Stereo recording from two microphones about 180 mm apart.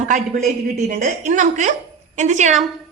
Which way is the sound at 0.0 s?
45° right (ahead or behind).